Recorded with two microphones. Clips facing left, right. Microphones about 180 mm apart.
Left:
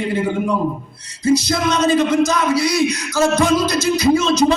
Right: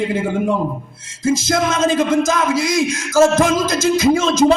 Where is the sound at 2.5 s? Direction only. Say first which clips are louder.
Left 1 dB; 90° right.